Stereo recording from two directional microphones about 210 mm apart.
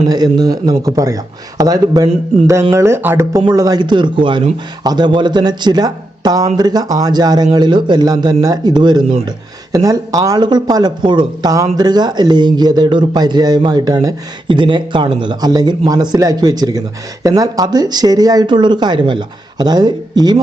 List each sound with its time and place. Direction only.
0.1 s speech: 20° right (ahead or behind)